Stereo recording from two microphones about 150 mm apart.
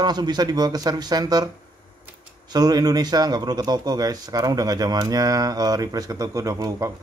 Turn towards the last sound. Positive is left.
turn(degrees=-20)  # may be behind; listen again after turning